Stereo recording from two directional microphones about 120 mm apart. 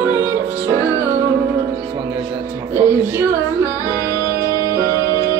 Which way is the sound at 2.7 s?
20° right (ahead or behind).